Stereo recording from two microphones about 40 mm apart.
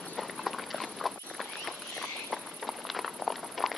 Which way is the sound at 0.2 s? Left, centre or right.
Centre.